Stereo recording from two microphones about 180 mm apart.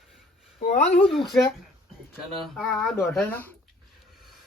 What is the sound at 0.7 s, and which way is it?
Speech, 35° left (ahead or behind).